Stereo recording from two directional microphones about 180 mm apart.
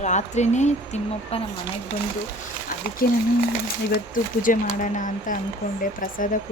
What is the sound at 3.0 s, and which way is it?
Speech, 55° left (ahead or behind).